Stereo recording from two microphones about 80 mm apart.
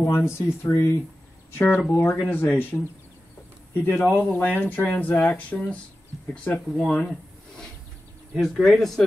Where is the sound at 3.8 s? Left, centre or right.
Left.